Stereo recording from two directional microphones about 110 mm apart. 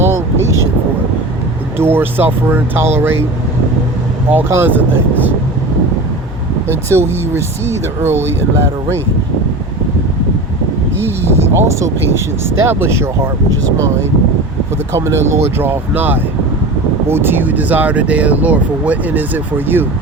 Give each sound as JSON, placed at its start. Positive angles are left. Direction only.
{"t": 0.0, "sound": "vehicle", "side_deg": -25}
{"t": 1.8, "sound": "speech", "side_deg": -20}
{"t": 4.3, "sound": "speech", "side_deg": -20}
{"t": 6.9, "sound": "speech", "side_deg": -25}
{"t": 11.0, "sound": "speech", "side_deg": -20}
{"t": 14.9, "sound": "speech", "side_deg": -25}